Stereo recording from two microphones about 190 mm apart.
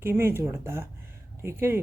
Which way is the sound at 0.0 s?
15° right (ahead or behind).